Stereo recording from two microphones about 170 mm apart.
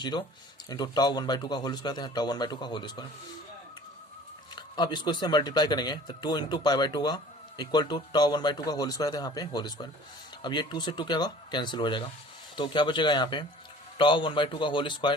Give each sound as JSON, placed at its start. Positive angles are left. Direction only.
{"t": 0.0, "sound": "speech", "side_deg": 25}
{"t": 4.5, "sound": "speech", "side_deg": 25}